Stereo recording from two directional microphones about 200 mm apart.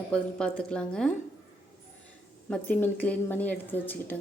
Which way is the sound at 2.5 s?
10° left (ahead or behind).